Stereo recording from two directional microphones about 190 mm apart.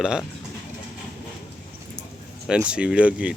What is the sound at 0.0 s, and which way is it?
Speech, 5° right (ahead or behind).